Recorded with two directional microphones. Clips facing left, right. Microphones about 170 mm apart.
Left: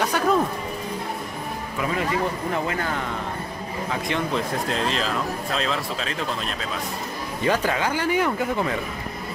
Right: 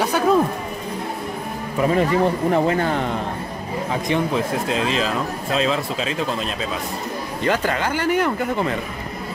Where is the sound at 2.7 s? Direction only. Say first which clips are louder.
Right 7 dB; 30° right (ahead or behind).